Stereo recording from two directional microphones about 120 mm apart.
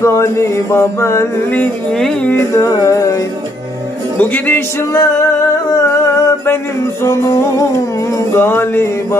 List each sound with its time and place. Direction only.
0.0 s music: 25° left (ahead or behind)
2.3 s music: 25° left (ahead or behind)
4.2 s music: 15° left (ahead or behind)